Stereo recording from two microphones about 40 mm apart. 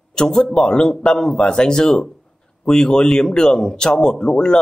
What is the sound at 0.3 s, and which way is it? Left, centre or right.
Speech, centre.